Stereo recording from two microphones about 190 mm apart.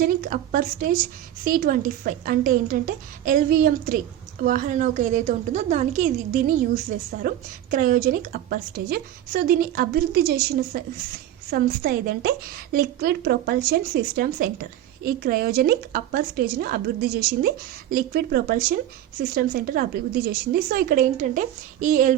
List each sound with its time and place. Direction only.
0.0 s a woman's voice: 50° right (ahead or behind)